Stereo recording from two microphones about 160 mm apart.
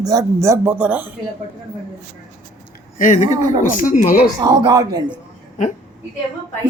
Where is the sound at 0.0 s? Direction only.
20° right (ahead or behind).